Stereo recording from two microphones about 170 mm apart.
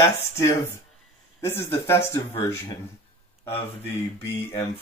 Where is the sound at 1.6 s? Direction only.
15° left (ahead or behind).